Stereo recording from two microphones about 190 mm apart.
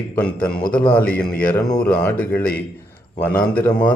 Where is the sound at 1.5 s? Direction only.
20° left (ahead or behind).